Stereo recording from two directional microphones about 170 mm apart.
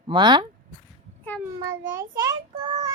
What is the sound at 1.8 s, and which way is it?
A child's voice, 15° right (ahead or behind).